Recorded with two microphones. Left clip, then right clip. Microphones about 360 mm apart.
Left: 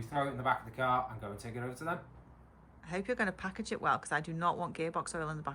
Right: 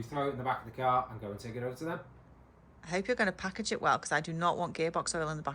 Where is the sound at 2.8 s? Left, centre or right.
Centre.